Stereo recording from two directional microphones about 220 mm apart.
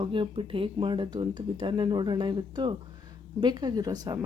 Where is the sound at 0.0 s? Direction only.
25° right (ahead or behind).